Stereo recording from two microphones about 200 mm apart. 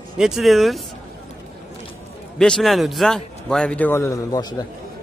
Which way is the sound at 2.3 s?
5° left (ahead or behind).